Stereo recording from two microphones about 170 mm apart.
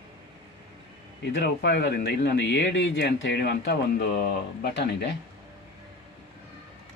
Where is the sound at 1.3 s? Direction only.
85° left.